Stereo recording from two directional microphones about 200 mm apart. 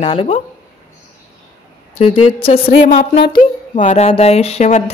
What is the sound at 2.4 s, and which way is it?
Speech, 30° left (ahead or behind).